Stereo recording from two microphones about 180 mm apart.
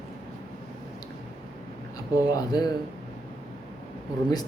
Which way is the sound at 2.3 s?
20° left (ahead or behind).